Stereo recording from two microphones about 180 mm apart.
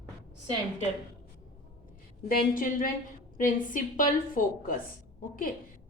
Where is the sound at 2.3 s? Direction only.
50° left (ahead or behind).